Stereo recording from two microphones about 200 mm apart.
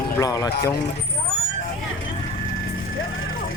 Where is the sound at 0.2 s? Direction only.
15° left (ahead or behind).